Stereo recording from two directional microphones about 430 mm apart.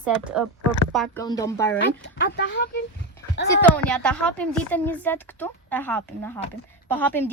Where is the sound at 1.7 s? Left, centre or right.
Left.